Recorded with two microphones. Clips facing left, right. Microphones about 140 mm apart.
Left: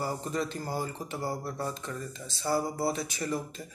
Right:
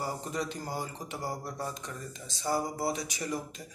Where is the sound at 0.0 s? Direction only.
15° right (ahead or behind).